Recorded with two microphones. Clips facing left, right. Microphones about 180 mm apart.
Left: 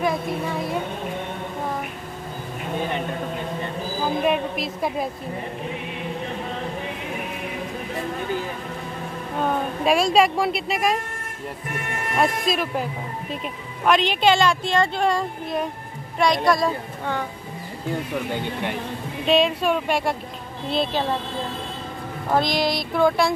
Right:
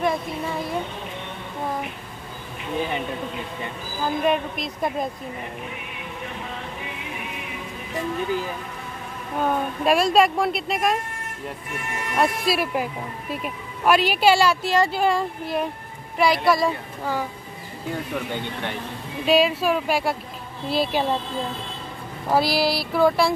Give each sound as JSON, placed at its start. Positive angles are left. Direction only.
{"t": 0.0, "sound": "speech", "side_deg": 0}
{"t": 4.2, "sound": "speech", "side_deg": 5}
{"t": 9.8, "sound": "speech", "side_deg": 0}
{"t": 12.4, "sound": "speech", "side_deg": -5}
{"t": 19.2, "sound": "speech", "side_deg": -5}
{"t": 22.3, "sound": "speech", "side_deg": -5}